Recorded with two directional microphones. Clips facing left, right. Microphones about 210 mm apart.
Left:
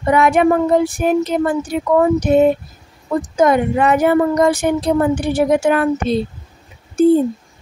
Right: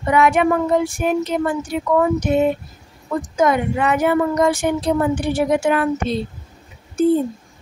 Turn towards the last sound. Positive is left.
turn(degrees=35)  # may be behind; listen again after turning